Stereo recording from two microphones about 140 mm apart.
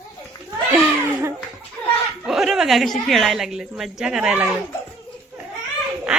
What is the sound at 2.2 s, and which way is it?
A woman's voice, 5° right (ahead or behind).